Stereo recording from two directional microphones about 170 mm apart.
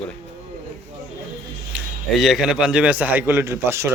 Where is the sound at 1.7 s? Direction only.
Centre (ahead or behind).